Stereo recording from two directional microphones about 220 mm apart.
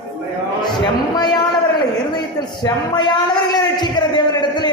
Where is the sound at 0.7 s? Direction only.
20° left (ahead or behind).